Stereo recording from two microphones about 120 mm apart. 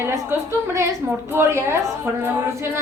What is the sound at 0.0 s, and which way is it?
Speech, 20° right (ahead or behind).